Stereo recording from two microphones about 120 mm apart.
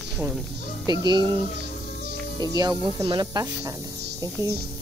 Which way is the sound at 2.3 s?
30° right (ahead or behind).